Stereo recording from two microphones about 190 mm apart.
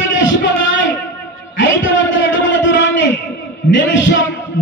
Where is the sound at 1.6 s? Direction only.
80° left.